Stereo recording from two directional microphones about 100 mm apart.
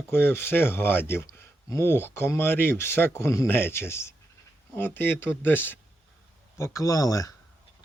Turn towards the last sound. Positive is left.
turn(degrees=35)  # may be behind; listen again after turning